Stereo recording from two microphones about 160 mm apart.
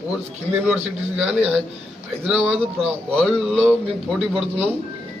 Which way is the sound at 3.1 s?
Centre (ahead or behind).